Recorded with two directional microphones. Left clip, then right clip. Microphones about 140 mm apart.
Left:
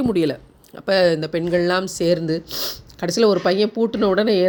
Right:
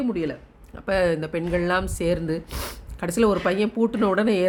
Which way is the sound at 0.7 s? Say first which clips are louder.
Left 5 dB; 25° left (ahead or behind).